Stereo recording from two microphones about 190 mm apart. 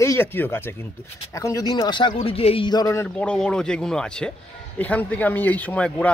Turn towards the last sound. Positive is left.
turn(degrees=5)  # may be behind; listen again after turning